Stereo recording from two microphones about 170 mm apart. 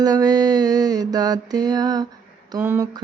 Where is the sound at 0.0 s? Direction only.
20° right (ahead or behind).